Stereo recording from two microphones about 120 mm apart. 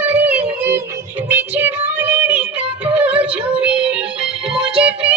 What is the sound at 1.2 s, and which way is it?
Child singing, 15° right (ahead or behind).